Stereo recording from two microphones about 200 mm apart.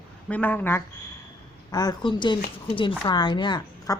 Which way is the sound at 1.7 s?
20° left (ahead or behind).